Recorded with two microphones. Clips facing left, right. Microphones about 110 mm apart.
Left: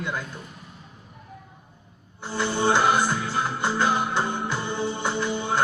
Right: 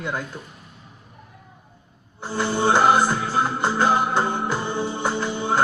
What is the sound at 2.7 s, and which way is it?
Music, 45° right (ahead or behind).